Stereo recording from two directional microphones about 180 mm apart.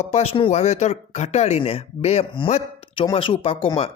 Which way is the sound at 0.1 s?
35° left (ahead or behind).